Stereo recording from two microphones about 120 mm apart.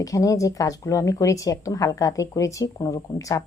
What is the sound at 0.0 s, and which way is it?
A woman's voice, 30° left (ahead or behind).